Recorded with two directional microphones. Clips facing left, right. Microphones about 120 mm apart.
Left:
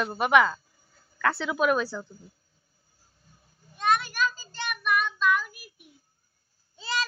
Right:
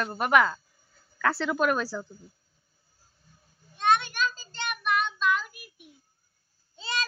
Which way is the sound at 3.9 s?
25° right (ahead or behind).